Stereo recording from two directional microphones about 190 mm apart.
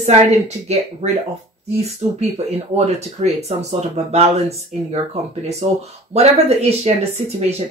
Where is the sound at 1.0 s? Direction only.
35° right (ahead or behind).